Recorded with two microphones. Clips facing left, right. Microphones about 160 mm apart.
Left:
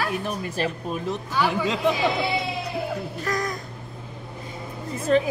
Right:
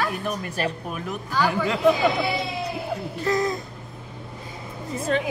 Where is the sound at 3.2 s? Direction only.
25° right (ahead or behind).